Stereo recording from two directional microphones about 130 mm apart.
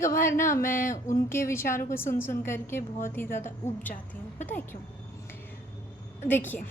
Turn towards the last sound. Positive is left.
turn(degrees=15)  # may be behind; listen again after turning